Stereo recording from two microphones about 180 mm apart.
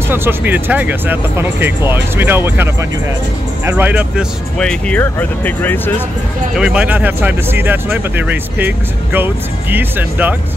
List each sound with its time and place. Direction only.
0.1 s speech: 10° right (ahead or behind)
4.6 s speech: 5° left (ahead or behind)
6.5 s speech: 5° right (ahead or behind)